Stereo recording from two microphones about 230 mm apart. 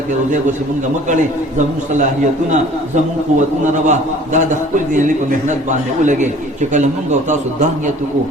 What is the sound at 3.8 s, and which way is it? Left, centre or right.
A man's voice, right.